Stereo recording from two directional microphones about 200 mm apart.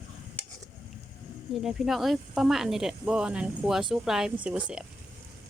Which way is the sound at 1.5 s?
5° right (ahead or behind).